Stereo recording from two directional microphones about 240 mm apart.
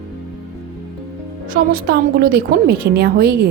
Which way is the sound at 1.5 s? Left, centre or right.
Right.